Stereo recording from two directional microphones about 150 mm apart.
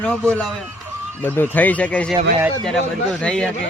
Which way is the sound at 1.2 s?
10° left (ahead or behind).